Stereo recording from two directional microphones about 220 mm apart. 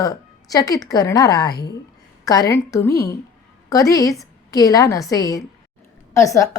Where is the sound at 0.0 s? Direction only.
15° left (ahead or behind).